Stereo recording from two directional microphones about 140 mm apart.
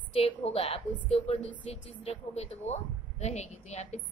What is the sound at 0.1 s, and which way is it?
Speech, 45° left (ahead or behind).